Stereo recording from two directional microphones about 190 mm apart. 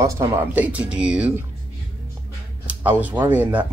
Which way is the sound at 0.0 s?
15° right (ahead or behind).